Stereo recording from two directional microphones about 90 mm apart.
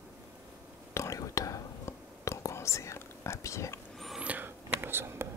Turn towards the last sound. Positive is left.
turn(degrees=-25)  # may be behind; listen again after turning